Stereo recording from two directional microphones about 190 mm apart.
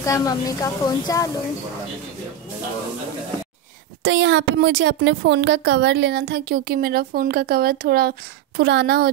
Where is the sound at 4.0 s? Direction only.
70° right (ahead or behind).